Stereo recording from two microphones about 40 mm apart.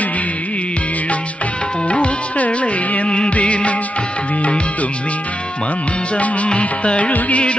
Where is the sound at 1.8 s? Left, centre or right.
Left.